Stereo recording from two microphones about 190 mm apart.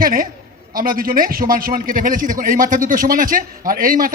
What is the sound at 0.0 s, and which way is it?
A woman's voice, 50° right (ahead or behind).